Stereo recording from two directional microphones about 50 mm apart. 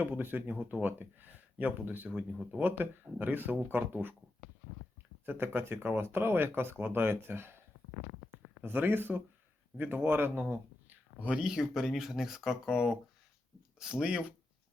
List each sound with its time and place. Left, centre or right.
0.0 s speech: right
2.1 s speech: right
2.6 s speech: right
5.2 s speech: right
8.6 s speech: right
10.4 s a sound: right
11.3 s speech: centre